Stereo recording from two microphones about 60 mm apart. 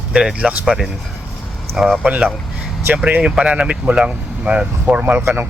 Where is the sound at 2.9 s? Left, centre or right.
Right.